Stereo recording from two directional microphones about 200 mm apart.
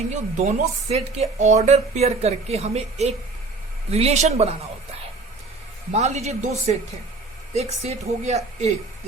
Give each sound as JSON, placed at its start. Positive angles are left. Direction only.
{"t": 0.1, "sound": "speech", "side_deg": -35}
{"t": 5.9, "sound": "speech", "side_deg": -35}